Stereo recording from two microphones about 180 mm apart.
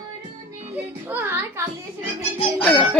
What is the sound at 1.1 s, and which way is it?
Speech, 10° right (ahead or behind).